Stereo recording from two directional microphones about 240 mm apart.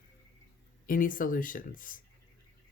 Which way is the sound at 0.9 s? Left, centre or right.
Left.